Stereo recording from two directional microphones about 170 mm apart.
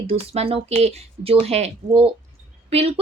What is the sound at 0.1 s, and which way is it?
A woman's voice, 35° right (ahead or behind).